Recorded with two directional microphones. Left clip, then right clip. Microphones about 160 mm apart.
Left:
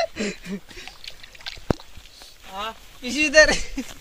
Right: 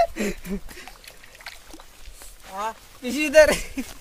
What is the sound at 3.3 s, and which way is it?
Speech, 40° right (ahead or behind).